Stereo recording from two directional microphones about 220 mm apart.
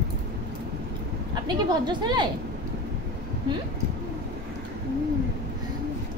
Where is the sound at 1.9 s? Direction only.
20° right (ahead or behind).